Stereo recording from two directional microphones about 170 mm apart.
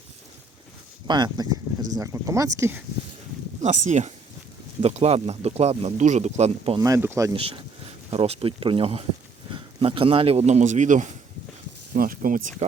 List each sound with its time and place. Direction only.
1.0 s speech: 25° right (ahead or behind)
3.6 s speech: 45° right (ahead or behind)
6.7 s speech: 15° right (ahead or behind)
7.3 s speech: 30° right (ahead or behind); by 12.6 s 50° right (ahead or behind)